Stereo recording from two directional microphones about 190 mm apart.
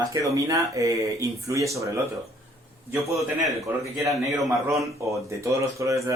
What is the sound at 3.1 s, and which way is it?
Speech, 15° right (ahead or behind).